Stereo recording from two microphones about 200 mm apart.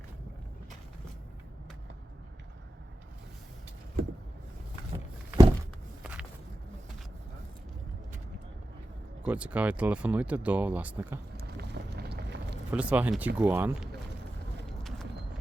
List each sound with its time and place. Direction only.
4.0 s vehicle: 45° right (ahead or behind)
6.0 s walk: 5° right (ahead or behind)
9.2 s speech: 5° right (ahead or behind)
11.4 s vehicle: 55° right (ahead or behind)
12.7 s speech: 5° right (ahead or behind)
14.7 s horse: centre (ahead or behind)